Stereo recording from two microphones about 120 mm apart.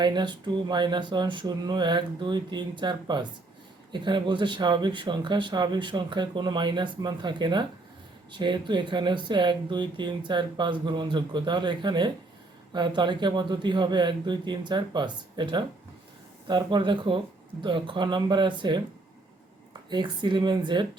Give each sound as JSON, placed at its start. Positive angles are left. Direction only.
{"t": 0.0, "sound": "speech", "side_deg": -40}
{"t": 19.9, "sound": "speech", "side_deg": -40}